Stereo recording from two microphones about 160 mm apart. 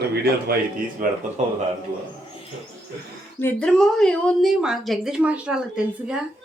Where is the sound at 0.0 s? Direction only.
85° right.